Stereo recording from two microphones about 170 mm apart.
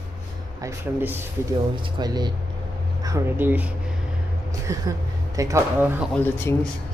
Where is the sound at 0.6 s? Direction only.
10° right (ahead or behind).